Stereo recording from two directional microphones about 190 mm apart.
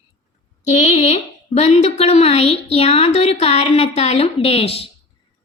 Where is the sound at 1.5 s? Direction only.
35° left (ahead or behind).